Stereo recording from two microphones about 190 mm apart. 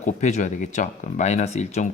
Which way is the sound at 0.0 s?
40° left (ahead or behind).